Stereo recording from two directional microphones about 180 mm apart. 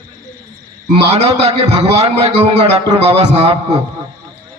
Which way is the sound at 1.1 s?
35° right (ahead or behind).